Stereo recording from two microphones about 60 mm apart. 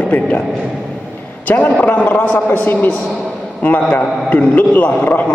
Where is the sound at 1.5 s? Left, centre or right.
Left.